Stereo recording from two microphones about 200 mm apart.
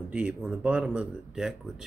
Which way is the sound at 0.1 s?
5° right (ahead or behind).